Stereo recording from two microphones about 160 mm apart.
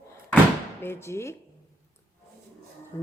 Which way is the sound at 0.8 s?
15° left (ahead or behind).